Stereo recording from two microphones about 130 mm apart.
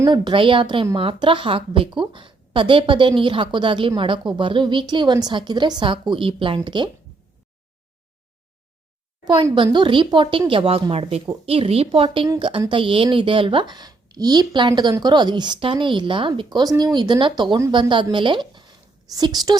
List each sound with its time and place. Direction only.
0.1 s a woman's voice: 40° right (ahead or behind)
9.2 s a woman's voice: 35° right (ahead or behind)